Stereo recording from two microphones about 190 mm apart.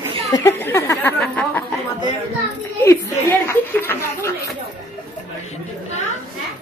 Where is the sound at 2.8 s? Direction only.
10° left (ahead or behind).